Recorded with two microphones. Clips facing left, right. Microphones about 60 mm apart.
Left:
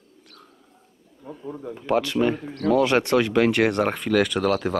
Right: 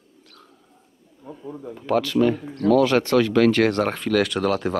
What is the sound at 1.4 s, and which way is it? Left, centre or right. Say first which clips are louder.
Speech: left 1 dB; left.